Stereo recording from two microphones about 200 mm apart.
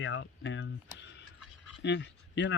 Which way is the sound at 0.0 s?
65° left (ahead or behind).